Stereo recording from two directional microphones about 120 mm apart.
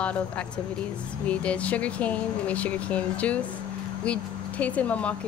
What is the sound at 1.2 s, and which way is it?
Speech, 10° left (ahead or behind).